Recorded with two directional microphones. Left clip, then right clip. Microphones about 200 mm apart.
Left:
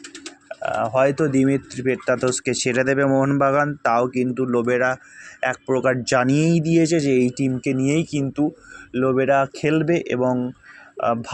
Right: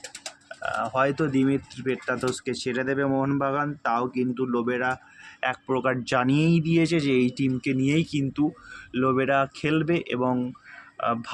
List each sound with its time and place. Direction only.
0.4 s speech: 20° left (ahead or behind)
5.4 s speech: 15° left (ahead or behind)